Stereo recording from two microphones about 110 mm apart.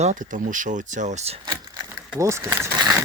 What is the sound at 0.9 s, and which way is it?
Speech, 90° right.